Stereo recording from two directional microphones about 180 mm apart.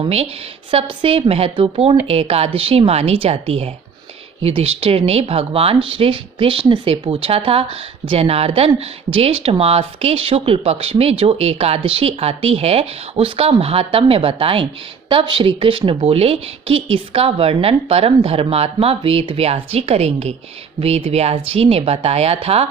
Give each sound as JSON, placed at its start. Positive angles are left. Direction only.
{"t": 0.0, "sound": "a woman's voice", "side_deg": -35}